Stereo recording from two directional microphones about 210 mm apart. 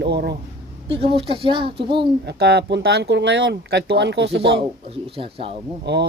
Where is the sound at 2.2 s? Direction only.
50° right (ahead or behind).